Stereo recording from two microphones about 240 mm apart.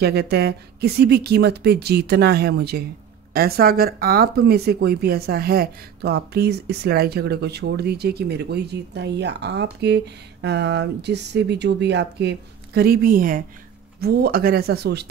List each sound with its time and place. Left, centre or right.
0.0 s speech: right